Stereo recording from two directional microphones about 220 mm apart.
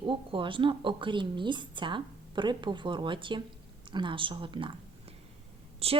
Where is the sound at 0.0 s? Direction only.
25° right (ahead or behind).